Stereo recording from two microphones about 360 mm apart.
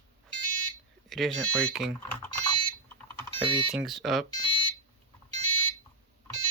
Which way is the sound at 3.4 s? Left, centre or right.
Centre.